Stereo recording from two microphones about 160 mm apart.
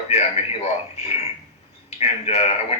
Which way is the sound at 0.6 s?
40° left (ahead or behind).